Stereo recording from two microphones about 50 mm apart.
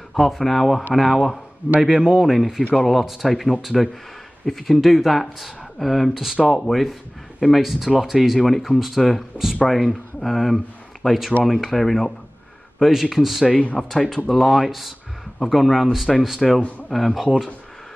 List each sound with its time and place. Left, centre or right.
0.1 s speech: centre
1.8 s a man's voice: centre
2.3 s speech: centre
6.2 s a man's voice: centre
6.7 s speech: centre
13.5 s speech: left
13.7 s speech: centre